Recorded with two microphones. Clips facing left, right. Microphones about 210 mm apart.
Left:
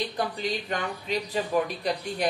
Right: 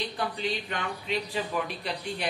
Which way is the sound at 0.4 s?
40° left (ahead or behind).